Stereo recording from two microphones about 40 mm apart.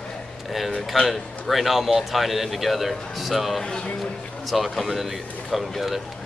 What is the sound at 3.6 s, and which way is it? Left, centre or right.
Speech, left.